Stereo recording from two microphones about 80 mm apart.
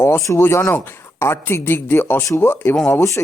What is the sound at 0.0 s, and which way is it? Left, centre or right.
Speech, left.